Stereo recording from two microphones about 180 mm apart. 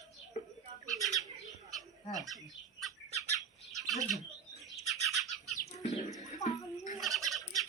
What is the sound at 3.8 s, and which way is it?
Bird, centre (ahead or behind).